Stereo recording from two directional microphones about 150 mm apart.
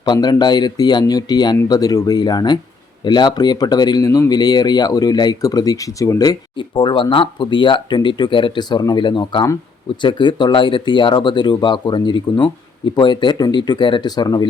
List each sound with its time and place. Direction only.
0.0 s speech: 30° left (ahead or behind)